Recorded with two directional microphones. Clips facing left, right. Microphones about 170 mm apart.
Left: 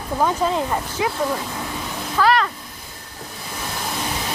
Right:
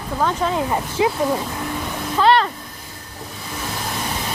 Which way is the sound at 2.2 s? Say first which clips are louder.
Right 2 dB; 30° right (ahead or behind).